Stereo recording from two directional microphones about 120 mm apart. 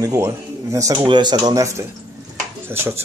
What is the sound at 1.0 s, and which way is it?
Speech, 40° right (ahead or behind).